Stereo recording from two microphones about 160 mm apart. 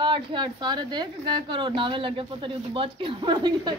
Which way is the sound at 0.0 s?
30° right (ahead or behind).